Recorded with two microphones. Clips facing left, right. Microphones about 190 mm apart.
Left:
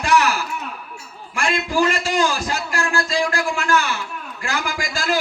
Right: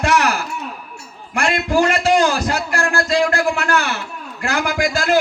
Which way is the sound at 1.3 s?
60° right (ahead or behind).